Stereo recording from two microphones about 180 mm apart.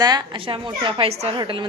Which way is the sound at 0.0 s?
25° right (ahead or behind).